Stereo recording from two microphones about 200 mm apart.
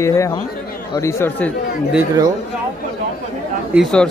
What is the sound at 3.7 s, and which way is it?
Speech, centre (ahead or behind).